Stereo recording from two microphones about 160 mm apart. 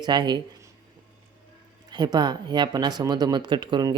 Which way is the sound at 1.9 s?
25° right (ahead or behind).